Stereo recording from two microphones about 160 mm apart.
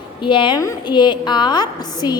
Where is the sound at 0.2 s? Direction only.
30° left (ahead or behind).